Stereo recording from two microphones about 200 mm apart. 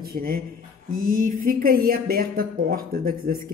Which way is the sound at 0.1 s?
45° right (ahead or behind).